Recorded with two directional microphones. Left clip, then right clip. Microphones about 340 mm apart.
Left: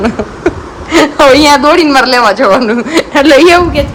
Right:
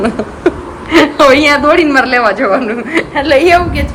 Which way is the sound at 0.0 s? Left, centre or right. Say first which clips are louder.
Left 1 dB; centre.